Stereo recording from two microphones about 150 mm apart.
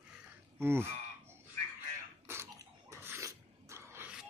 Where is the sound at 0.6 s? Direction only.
15° right (ahead or behind).